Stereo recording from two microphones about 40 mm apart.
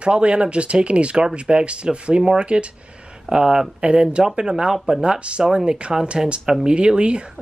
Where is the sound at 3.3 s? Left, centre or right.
Centre.